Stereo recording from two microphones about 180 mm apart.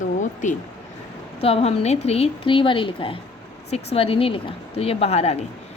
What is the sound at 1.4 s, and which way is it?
A woman's voice, 35° left (ahead or behind).